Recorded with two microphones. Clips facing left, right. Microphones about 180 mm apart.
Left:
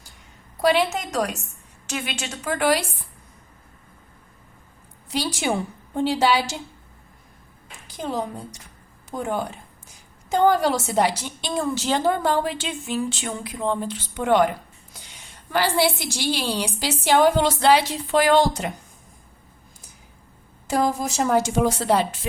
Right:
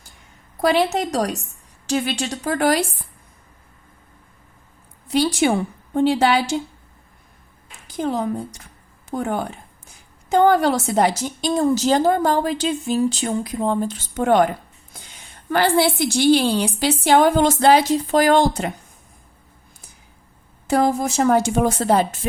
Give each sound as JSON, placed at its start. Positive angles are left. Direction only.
{"t": 0.6, "sound": "a woman's voice", "side_deg": -40}
{"t": 5.1, "sound": "a woman's voice", "side_deg": -55}
{"t": 9.1, "sound": "a woman's voice", "side_deg": -55}
{"t": 15.4, "sound": "a woman's voice", "side_deg": -50}
{"t": 20.7, "sound": "a woman's voice", "side_deg": -55}